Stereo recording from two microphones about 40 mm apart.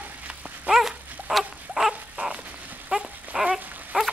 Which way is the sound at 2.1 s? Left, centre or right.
Right.